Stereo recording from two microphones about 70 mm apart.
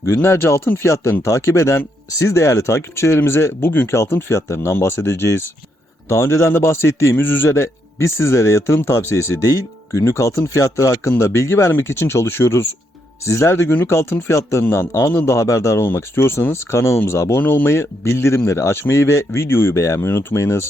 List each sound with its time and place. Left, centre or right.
0.1 s speech: left
3.9 s speech: left
15.8 s speech: left
17.4 s speech: left
17.7 s speech: left
19.7 s speech: left